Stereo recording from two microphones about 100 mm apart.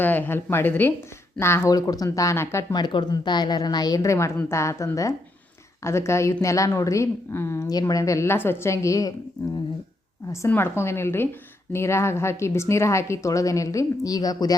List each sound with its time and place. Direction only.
0.0 s a woman's voice: 20° left (ahead or behind)
1.7 s a woman's voice: 40° left (ahead or behind)
2.7 s a woman's voice: 45° left (ahead or behind); by 7.7 s 25° left (ahead or behind)
7.7 s a woman's voice: 40° left (ahead or behind)
10.5 s a woman's voice: 25° left (ahead or behind); by 14.5 s 40° left (ahead or behind)